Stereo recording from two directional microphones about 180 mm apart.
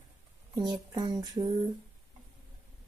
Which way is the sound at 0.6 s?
25° right (ahead or behind).